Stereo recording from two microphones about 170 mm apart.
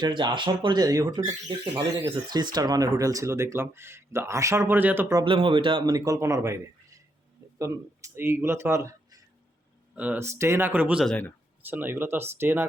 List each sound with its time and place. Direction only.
0.0 s speech: 25° right (ahead or behind)
5.2 s speech: 30° right (ahead or behind)
7.6 s speech: 15° right (ahead or behind)
9.9 s speech: 10° right (ahead or behind)
11.0 s speech: 5° left (ahead or behind)
11.6 s speech: 10° right (ahead or behind)